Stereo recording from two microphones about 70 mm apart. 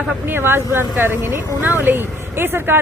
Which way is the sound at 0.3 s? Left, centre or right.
Right.